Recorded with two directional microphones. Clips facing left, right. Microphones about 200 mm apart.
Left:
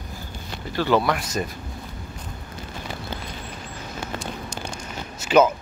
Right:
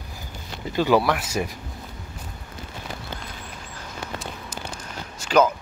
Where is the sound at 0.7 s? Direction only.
10° right (ahead or behind).